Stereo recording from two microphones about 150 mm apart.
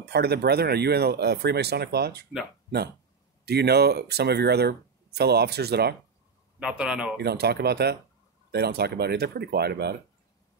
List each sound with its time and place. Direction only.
0.0 s speech: 90° right
3.4 s speech: 90° right
6.6 s speech: 5° right (ahead or behind)
7.2 s speech: 90° right